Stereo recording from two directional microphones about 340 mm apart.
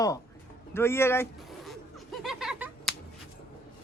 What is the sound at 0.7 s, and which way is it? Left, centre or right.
Speech, centre.